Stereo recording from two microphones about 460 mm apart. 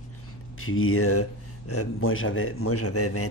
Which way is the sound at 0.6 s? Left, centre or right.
Left.